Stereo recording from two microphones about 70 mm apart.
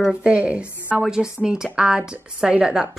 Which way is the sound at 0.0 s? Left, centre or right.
Centre.